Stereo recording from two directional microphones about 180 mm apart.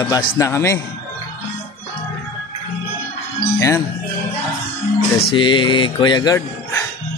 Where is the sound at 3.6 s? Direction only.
15° left (ahead or behind).